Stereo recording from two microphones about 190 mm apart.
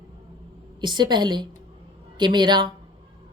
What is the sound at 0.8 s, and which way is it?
A woman's voice, 25° right (ahead or behind).